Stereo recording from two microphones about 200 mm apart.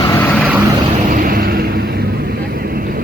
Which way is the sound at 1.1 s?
45° right (ahead or behind).